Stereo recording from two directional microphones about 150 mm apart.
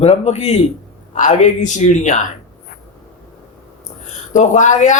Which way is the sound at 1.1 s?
55° left (ahead or behind).